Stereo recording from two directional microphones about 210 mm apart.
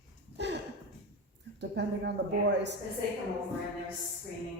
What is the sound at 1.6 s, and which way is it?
A man's voice, 55° right (ahead or behind).